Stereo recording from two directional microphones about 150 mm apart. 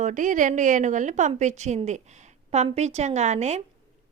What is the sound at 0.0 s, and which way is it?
A woman's voice, 60° right (ahead or behind).